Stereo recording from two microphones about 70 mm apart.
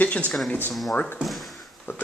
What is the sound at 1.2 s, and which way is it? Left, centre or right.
Drawer open or close, centre.